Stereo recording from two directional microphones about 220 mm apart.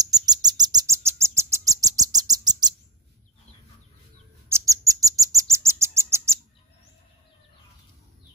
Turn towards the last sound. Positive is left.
turn(degrees=-15)  # may be behind; listen again after turning